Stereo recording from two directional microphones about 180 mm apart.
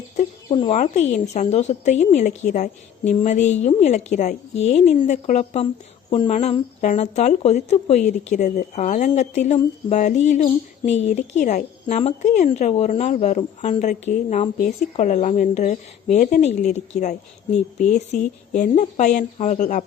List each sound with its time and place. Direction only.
0.4 s speech: 25° left (ahead or behind)
0.7 s a woman's voice: 40° left (ahead or behind)